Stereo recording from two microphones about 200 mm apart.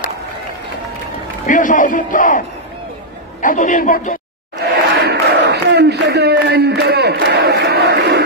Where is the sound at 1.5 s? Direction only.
40° left (ahead or behind).